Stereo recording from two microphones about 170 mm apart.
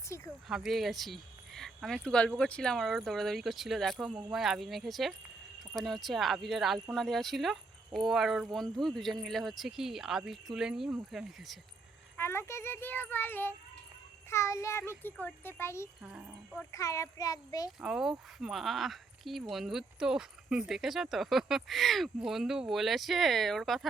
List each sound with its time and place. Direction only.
0.1 s a sound: 15° left (ahead or behind)
0.4 s speech: centre (ahead or behind)
12.1 s a child's voice: 15° left (ahead or behind)
16.0 s speech: 5° right (ahead or behind)
16.6 s a child's voice: 20° left (ahead or behind)
17.7 s speech: 5° right (ahead or behind)